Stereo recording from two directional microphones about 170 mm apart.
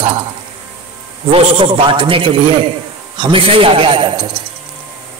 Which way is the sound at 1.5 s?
30° right (ahead or behind).